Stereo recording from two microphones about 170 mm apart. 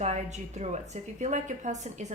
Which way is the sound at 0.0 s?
40° right (ahead or behind).